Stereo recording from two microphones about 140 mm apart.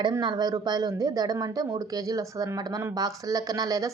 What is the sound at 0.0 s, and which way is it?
Speech, 30° right (ahead or behind).